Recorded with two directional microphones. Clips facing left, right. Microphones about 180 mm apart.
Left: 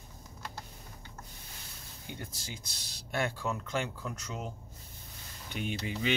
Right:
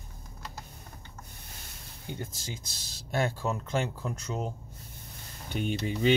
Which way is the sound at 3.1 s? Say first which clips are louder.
Right 3 dB; 40° right (ahead or behind).